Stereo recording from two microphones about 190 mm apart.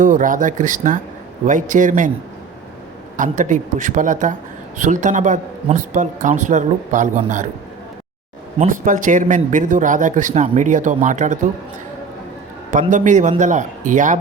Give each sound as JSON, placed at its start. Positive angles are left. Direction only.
{"t": 0.0, "sound": "a man's voice", "side_deg": -45}
{"t": 3.2, "sound": "a man's voice", "side_deg": -40}
{"t": 8.5, "sound": "a man's voice", "side_deg": -45}
{"t": 12.9, "sound": "a man's voice", "side_deg": -40}